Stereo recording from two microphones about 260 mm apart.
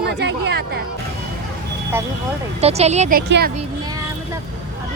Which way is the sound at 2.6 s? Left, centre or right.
Right.